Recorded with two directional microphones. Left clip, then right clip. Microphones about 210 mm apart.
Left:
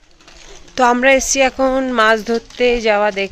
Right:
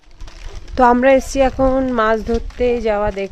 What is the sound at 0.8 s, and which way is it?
Speech, 25° right (ahead or behind).